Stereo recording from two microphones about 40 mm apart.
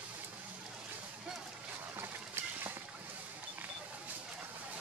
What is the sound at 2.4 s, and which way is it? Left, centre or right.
Boat, right.